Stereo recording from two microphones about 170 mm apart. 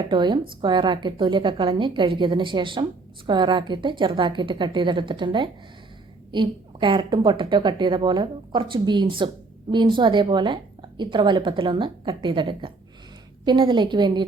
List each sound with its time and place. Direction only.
0.1 s a woman's voice: 25° right (ahead or behind)